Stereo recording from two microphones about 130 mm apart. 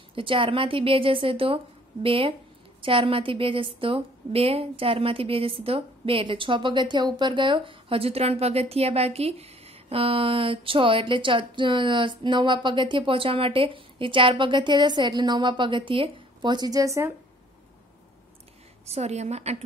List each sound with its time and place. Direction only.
0.1 s a woman's voice: 40° right (ahead or behind); by 17.1 s 25° right (ahead or behind)
18.9 s a woman's voice: 55° right (ahead or behind)